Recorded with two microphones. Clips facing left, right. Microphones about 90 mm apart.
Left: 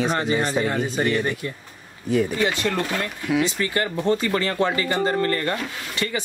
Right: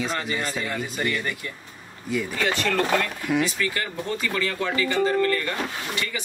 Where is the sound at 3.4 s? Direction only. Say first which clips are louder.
Left 3 dB; 30° left (ahead or behind).